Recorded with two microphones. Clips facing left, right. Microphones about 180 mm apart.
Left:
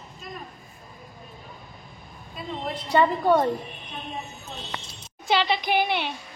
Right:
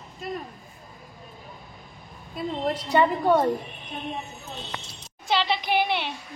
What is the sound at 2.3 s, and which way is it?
Speech, 80° right.